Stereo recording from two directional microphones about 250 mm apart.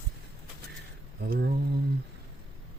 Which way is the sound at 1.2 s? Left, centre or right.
Right.